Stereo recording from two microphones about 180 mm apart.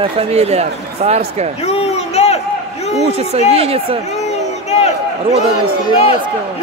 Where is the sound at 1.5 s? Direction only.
35° left (ahead or behind).